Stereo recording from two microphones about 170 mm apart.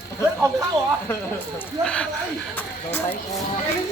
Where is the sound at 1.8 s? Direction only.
5° left (ahead or behind).